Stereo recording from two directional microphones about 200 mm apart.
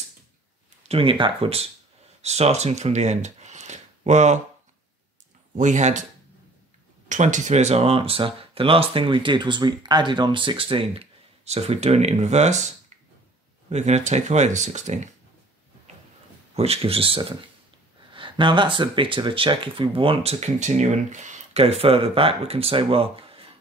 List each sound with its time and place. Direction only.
0.8 s speech: 25° right (ahead or behind)
5.6 s speech: 35° right (ahead or behind)
7.1 s speech: 40° right (ahead or behind)
16.5 s speech: 30° right (ahead or behind)